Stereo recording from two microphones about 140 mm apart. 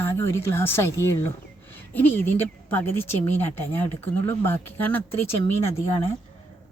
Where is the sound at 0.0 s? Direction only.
20° left (ahead or behind).